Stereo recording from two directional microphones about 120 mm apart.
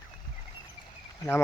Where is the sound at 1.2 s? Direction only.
25° left (ahead or behind).